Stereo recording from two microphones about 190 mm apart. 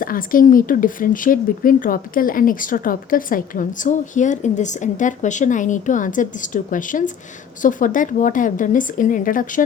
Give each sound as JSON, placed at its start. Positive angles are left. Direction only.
{"t": 0.0, "sound": "speech", "side_deg": 45}